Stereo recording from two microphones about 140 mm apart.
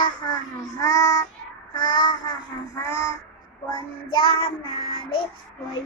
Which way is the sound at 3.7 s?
35° left (ahead or behind).